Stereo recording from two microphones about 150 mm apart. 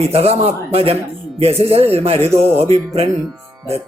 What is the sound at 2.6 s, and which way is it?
Speech, 45° right (ahead or behind).